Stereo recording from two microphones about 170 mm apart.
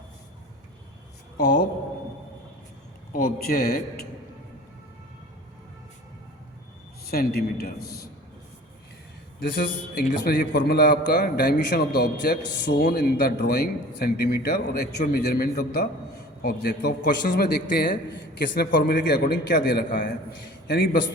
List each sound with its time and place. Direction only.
3.1 s a man's voice: 60° left (ahead or behind)
7.0 s a man's voice: 65° left (ahead or behind)
9.4 s a man's voice: 60° left (ahead or behind)